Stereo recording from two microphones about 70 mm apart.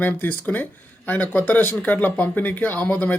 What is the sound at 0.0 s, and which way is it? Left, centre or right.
Speech, left.